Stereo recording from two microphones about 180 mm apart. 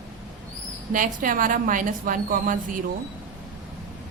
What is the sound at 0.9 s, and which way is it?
A woman's voice, 50° right (ahead or behind).